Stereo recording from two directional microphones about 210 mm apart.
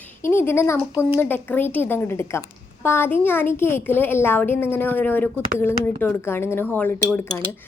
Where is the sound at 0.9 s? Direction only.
10° right (ahead or behind).